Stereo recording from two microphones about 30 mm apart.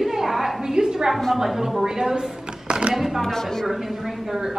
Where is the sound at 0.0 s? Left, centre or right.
Centre.